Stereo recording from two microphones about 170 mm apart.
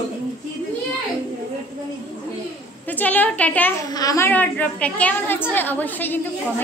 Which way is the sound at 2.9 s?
10° left (ahead or behind).